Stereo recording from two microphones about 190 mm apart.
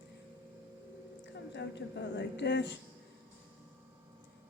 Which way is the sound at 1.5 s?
65° left (ahead or behind).